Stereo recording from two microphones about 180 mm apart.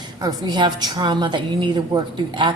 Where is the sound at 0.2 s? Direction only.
20° right (ahead or behind).